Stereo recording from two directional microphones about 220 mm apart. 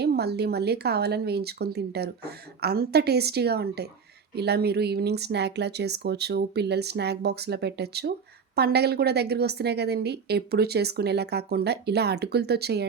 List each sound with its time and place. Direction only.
0.0 s a woman's voice: 45° right (ahead or behind)